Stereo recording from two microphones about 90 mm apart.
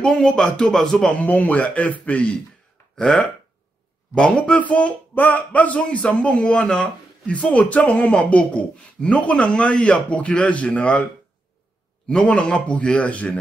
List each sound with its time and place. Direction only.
0.0 s speech: 15° left (ahead or behind)
1.1 s speech: 15° left (ahead or behind)
12.1 s speech: 10° left (ahead or behind)